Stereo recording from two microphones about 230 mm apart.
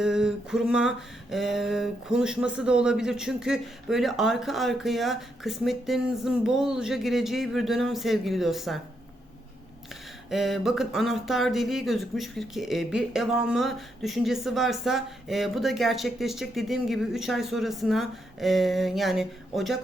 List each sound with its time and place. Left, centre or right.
0.0 s speech: centre
10.2 s speech: centre